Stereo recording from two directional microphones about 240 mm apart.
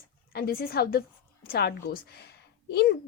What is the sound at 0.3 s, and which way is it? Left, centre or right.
Speech, left.